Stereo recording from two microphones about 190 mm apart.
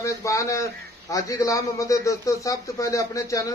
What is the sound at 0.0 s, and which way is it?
A man's voice, 15° left (ahead or behind).